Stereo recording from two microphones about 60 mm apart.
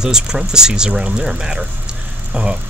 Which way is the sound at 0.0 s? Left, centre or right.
Centre.